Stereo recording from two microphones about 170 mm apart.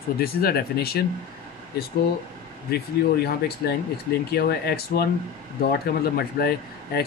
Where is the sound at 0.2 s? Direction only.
65° left (ahead or behind).